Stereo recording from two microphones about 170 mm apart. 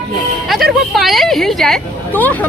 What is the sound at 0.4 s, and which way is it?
A woman's voice, centre (ahead or behind).